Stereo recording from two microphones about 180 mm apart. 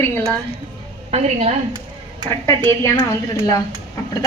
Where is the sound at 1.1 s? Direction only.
35° right (ahead or behind).